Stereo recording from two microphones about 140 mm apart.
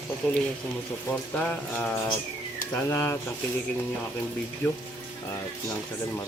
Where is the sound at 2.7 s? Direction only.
20° left (ahead or behind).